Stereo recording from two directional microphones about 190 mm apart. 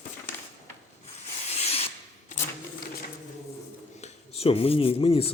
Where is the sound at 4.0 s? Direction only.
30° left (ahead or behind).